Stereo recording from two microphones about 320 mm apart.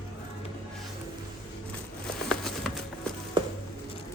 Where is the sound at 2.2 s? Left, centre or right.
Centre.